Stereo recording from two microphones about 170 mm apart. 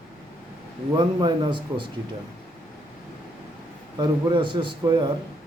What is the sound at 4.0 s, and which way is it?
Speech, 30° right (ahead or behind).